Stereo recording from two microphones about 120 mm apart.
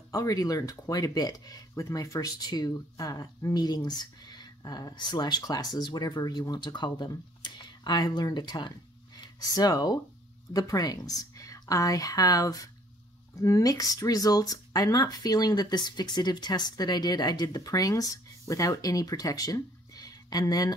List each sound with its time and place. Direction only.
0.1 s a woman's voice: 30° left (ahead or behind)